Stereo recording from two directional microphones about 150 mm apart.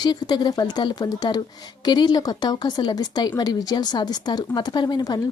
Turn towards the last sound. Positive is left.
turn(degrees=25)  # may be behind; listen again after turning